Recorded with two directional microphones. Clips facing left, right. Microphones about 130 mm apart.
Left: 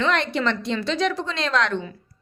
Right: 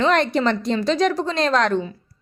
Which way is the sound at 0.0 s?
45° right (ahead or behind).